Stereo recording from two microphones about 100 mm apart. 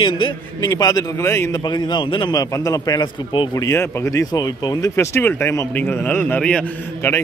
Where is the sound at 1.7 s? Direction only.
45° left (ahead or behind).